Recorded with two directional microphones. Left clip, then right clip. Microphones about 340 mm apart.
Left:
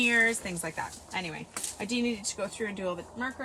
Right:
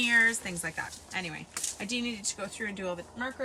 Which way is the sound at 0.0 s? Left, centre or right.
Centre.